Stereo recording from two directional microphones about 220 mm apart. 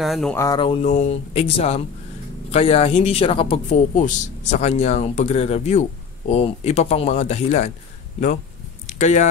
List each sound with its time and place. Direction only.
0.0 s speech: centre (ahead or behind)
0.4 s speech: 20° left (ahead or behind)
8.8 s speech: 35° left (ahead or behind)